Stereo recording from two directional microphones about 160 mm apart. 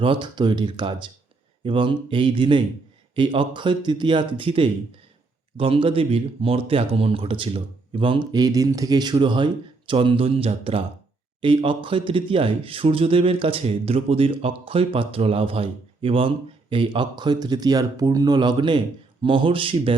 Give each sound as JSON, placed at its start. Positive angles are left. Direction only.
{"t": 0.0, "sound": "speech", "side_deg": -30}